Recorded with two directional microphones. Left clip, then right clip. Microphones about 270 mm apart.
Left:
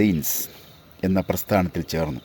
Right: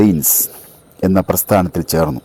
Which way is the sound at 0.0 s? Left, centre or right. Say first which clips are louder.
Right 8 dB; right.